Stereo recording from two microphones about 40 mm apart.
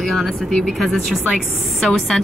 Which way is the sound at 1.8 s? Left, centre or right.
Centre.